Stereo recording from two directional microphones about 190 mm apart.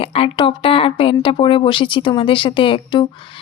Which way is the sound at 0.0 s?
30° left (ahead or behind).